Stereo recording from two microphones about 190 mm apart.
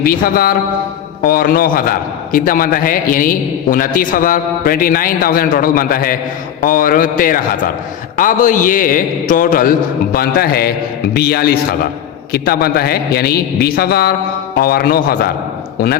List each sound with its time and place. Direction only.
0.0 s a man's voice: 50° left (ahead or behind)